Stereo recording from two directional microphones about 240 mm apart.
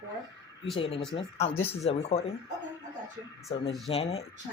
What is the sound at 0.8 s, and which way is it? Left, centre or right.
Speech, left.